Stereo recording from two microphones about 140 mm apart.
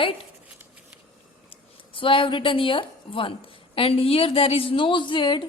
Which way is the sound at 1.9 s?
40° left (ahead or behind).